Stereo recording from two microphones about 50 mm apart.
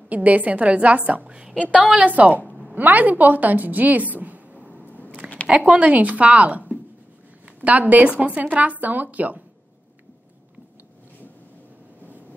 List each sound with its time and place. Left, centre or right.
0.1 s a woman's voice: right
4.8 s a sound: left
5.5 s a woman's voice: right